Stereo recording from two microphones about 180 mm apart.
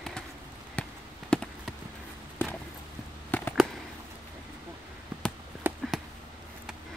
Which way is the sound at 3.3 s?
10° left (ahead or behind).